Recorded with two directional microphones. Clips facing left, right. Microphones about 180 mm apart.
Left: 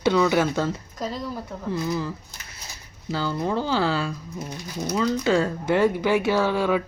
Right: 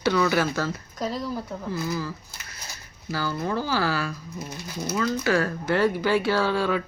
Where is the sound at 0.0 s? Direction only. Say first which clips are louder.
Left 2 dB; 20° left (ahead or behind).